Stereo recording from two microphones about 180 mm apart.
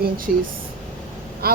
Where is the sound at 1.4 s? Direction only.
60° right (ahead or behind).